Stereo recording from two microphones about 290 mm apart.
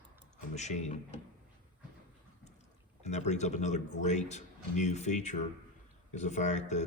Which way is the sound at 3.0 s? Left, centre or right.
Left.